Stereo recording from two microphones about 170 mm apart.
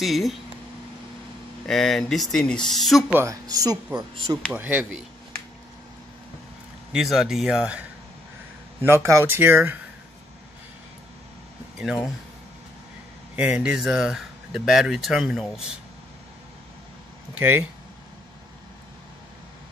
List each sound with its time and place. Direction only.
0.0 s speech: centre (ahead or behind)
1.7 s speech: centre (ahead or behind)
3.2 s speech: 20° right (ahead or behind)
4.5 s speech: 10° right (ahead or behind)
6.9 s speech: 5° right (ahead or behind)
8.8 s speech: 15° right (ahead or behind)
13.4 s speech: 5° right (ahead or behind)
17.3 s speech: 10° right (ahead or behind)